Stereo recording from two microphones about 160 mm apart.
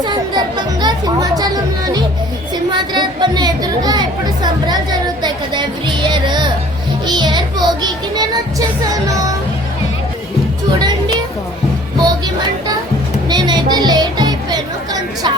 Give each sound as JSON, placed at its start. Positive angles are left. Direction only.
{"t": 0.0, "sound": "speech", "side_deg": -30}
{"t": 2.7, "sound": "speech", "side_deg": -25}
{"t": 10.8, "sound": "music", "side_deg": -25}
{"t": 13.2, "sound": "music", "side_deg": -25}